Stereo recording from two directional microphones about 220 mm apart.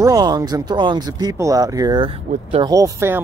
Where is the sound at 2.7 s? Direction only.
15° right (ahead or behind).